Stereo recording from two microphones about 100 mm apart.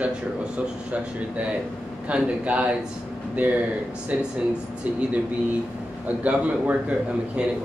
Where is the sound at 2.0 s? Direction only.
15° right (ahead or behind).